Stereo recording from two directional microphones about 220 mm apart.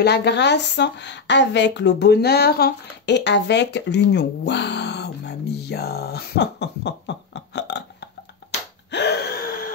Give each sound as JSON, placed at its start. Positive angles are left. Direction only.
{"t": 0.0, "sound": "a woman's voice", "side_deg": 50}
{"t": 8.9, "sound": "gasp", "side_deg": 50}